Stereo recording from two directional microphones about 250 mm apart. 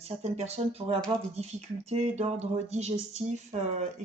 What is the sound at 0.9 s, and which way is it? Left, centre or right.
Speech, centre.